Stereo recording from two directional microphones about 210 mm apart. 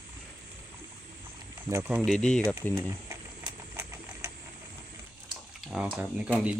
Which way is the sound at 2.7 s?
15° right (ahead or behind).